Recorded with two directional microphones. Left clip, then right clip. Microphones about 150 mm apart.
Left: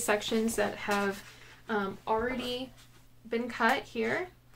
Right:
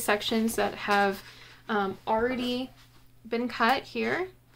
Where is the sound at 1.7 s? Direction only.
55° right (ahead or behind).